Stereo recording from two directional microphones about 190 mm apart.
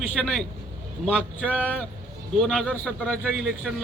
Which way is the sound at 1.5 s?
5° right (ahead or behind).